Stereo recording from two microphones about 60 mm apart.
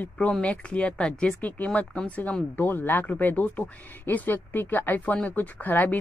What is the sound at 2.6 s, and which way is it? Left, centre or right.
Speech, left.